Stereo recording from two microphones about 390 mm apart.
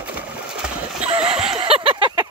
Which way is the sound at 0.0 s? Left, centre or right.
Centre.